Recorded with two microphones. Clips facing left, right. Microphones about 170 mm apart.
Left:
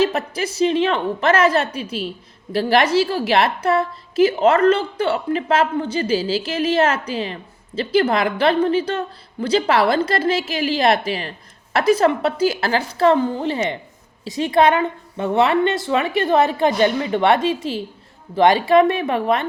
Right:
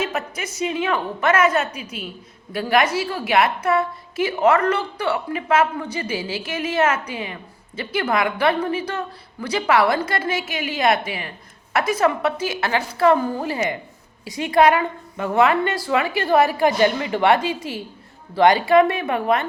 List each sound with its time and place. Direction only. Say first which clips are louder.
0.0 s a woman's voice: left 6 dB; 30° left (ahead or behind)